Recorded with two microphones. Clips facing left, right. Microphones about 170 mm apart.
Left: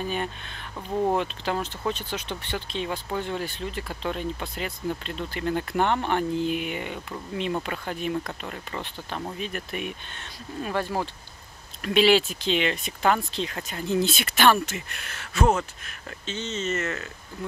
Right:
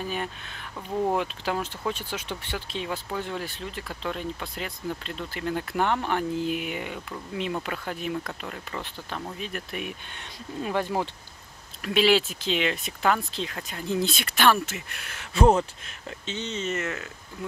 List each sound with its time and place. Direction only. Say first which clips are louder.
0.0 s speech: left 2 dB; 5° right (ahead or behind)
10.1 s speech: even; 15° right (ahead or behind)
11.8 s speech: left 2 dB; centre (ahead or behind)
15.3 s speech: right 3 dB; 30° right (ahead or behind); by 17.5 s 5° right (ahead or behind)